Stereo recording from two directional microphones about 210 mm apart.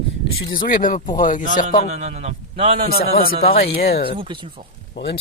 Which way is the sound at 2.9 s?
45° left (ahead or behind).